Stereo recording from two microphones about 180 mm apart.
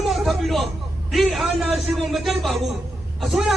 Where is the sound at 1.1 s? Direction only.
Centre (ahead or behind).